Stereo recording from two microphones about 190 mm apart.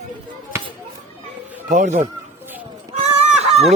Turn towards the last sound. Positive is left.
turn(degrees=-35)  # may be behind; listen again after turning